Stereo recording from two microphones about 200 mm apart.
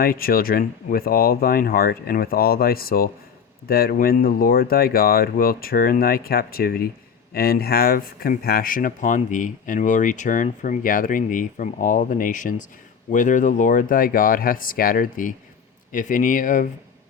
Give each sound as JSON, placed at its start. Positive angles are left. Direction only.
{"t": 0.0, "sound": "speech", "side_deg": 45}